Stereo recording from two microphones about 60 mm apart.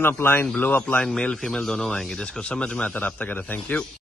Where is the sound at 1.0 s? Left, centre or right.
Centre.